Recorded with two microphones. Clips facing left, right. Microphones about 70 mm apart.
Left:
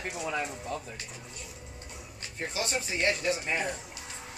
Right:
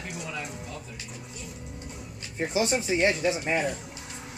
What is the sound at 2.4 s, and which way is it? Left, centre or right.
Speech, right.